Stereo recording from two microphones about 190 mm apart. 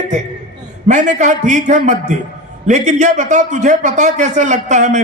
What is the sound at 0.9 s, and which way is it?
A man's voice, 40° right (ahead or behind).